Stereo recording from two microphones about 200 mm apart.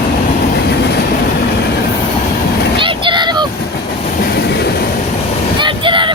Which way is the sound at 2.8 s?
25° right (ahead or behind).